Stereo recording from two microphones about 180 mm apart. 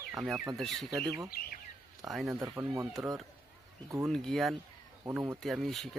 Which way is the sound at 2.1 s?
Centre (ahead or behind).